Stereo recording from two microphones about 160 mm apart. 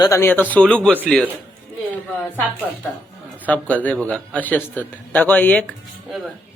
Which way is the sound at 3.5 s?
10° left (ahead or behind).